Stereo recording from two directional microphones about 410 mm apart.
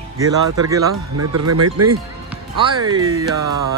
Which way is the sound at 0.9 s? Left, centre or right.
Right.